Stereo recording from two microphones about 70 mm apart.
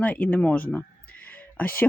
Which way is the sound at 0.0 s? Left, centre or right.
Left.